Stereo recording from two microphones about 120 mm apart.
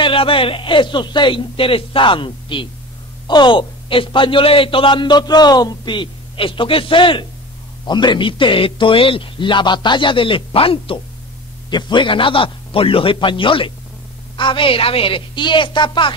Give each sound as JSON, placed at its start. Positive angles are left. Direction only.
{"t": 0.0, "sound": "speech", "side_deg": 50}